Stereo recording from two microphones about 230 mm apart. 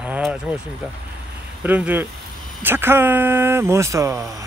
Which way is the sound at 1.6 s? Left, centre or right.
Centre.